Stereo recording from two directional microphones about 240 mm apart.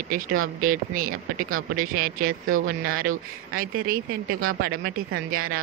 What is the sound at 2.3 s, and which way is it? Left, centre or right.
Speech, right.